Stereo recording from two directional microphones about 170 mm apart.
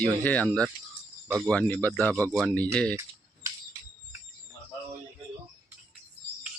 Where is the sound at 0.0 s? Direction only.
10° left (ahead or behind).